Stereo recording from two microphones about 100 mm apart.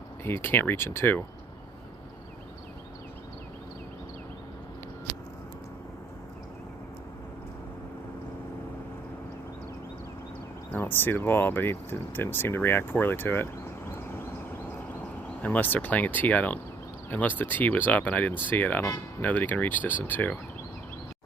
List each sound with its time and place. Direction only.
0.3 s speech: 20° left (ahead or behind)
10.7 s speech: 20° left (ahead or behind)
15.4 s speech: 15° left (ahead or behind)